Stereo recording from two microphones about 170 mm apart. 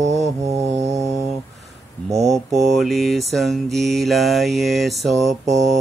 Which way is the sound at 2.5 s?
Centre (ahead or behind).